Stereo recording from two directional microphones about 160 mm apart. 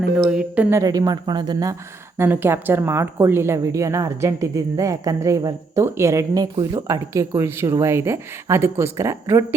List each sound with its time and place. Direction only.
0.3 s a woman's voice: 5° right (ahead or behind)
0.8 s a woman's voice: 25° right (ahead or behind)